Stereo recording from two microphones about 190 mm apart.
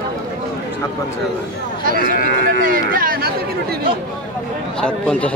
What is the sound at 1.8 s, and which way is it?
Speech, 50° right (ahead or behind).